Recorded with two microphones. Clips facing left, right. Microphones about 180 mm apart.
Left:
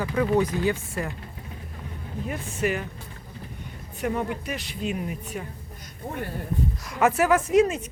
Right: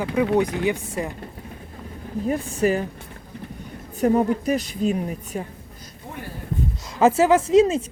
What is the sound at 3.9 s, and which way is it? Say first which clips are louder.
A woman's voice: right 9 dB; 40° right (ahead or behind).